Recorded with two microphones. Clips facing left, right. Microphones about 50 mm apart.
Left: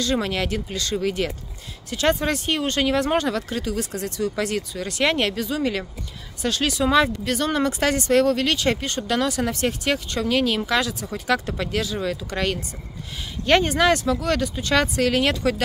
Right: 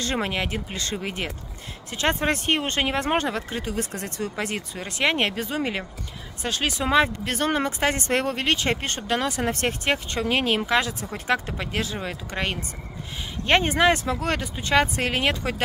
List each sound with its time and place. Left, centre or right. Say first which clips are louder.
0.0 s speech: left 3 dB; right
9.5 s speech: left 1 dB; right